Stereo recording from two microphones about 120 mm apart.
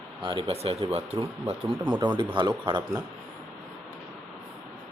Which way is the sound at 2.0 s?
40° right (ahead or behind).